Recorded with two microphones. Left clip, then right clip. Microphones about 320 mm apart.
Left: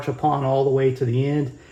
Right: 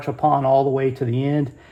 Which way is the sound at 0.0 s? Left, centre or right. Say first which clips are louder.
Right 3 dB; centre.